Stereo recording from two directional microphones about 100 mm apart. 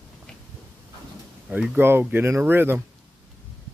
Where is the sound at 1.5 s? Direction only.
15° right (ahead or behind).